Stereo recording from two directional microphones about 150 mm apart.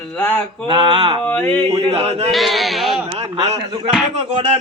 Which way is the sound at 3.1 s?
40° right (ahead or behind).